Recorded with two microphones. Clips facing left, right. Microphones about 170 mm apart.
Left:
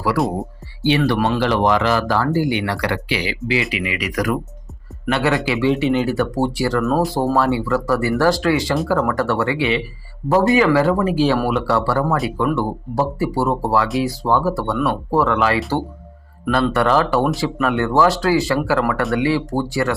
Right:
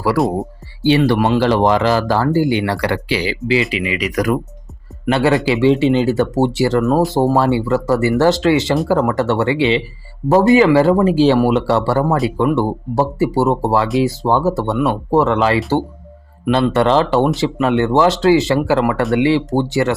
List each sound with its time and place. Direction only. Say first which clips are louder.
0.9 s speech: right 4 dB; 30° right (ahead or behind)